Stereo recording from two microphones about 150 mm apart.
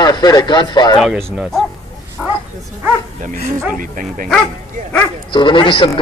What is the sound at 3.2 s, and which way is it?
Speech, 60° right (ahead or behind).